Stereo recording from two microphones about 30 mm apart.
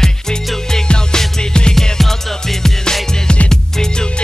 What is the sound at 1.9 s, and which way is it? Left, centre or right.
Music, centre.